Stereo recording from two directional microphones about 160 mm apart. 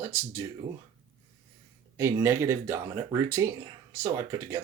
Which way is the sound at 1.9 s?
15° right (ahead or behind).